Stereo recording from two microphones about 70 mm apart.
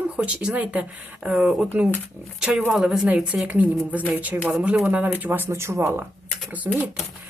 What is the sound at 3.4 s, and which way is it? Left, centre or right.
A woman's voice, right.